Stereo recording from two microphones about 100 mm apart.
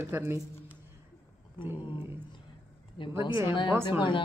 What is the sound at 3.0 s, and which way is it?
Speech, 55° left (ahead or behind).